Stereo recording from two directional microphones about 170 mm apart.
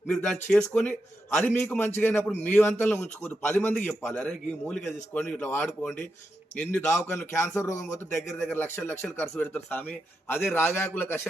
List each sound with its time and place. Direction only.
0.1 s a man's voice: 10° left (ahead or behind)